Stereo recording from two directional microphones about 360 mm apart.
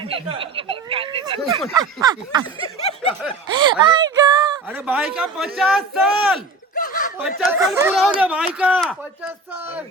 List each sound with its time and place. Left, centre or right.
0.0 s speech: centre
2.7 s snicker: centre
3.5 s a sound: centre
5.5 s speech: centre
6.7 s chuckle: left
7.2 s speech: centre